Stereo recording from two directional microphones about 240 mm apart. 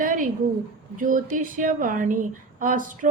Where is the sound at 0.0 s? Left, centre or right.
Right.